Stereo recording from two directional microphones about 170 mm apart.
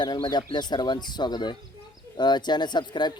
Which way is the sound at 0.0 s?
25° left (ahead or behind).